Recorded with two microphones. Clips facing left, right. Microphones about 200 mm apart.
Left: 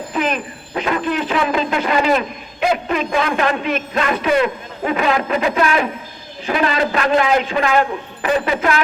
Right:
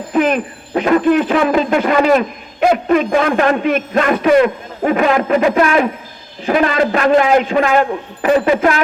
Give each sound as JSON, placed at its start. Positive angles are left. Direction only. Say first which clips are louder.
{"t": 0.1, "sound": "speech", "louder": "right 7 dB", "side_deg": -50}